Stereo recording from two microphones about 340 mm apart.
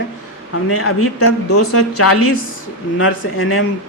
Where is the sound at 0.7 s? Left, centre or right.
Left.